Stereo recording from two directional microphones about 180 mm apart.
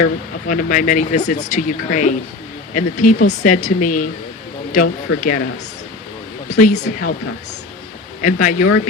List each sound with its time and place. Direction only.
0.0 s speech: 45° left (ahead or behind)
6.6 s speech: 40° left (ahead or behind)
8.2 s speech: 45° left (ahead or behind)